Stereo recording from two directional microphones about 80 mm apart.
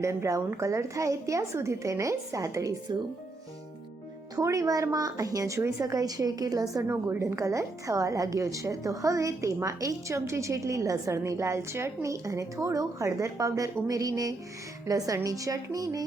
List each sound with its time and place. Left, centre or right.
0.0 s a woman's voice: right
4.4 s a woman's voice: right
6.8 s a woman's voice: right